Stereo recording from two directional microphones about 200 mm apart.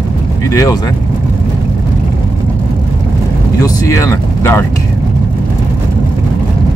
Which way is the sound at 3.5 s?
15° left (ahead or behind).